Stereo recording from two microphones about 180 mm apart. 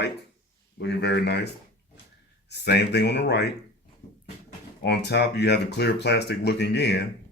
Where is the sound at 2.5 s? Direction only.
65° left (ahead or behind).